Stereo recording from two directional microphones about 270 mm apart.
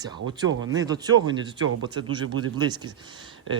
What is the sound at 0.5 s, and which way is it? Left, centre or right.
Speech, right.